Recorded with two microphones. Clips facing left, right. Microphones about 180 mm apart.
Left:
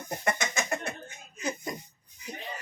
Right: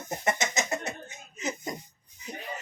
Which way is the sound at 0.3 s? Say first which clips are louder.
Right 1 dB; 20° right (ahead or behind).